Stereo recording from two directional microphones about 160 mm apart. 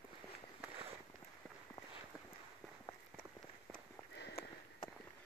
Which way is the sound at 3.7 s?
75° left (ahead or behind).